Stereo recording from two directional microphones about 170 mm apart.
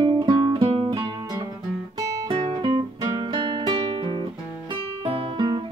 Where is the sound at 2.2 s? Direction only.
30° right (ahead or behind).